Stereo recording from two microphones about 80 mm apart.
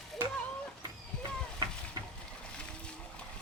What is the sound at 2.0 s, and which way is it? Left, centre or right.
Boat, right.